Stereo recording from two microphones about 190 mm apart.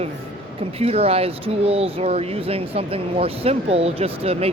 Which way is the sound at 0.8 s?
30° right (ahead or behind).